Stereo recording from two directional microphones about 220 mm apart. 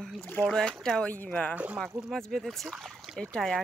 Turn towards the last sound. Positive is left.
turn(degrees=5)  # may be behind; listen again after turning